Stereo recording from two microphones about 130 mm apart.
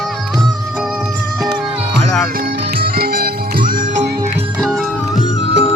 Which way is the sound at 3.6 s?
90° right.